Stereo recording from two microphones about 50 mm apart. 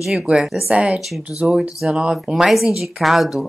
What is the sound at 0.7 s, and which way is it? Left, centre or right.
Speech, right.